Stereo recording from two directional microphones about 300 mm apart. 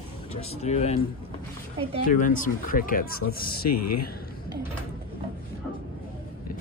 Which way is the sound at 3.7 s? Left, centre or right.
Left.